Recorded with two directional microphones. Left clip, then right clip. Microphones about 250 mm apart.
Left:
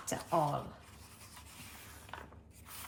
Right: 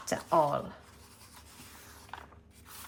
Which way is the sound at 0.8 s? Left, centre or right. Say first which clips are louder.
Right 1 dB; centre.